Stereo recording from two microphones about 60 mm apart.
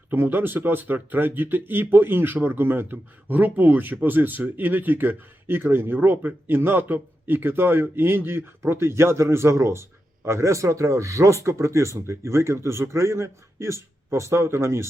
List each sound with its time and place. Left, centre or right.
0.1 s a man's voice: right